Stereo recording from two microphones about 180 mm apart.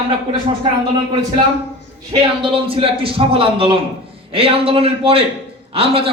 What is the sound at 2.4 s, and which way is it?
A man's voice, 30° right (ahead or behind).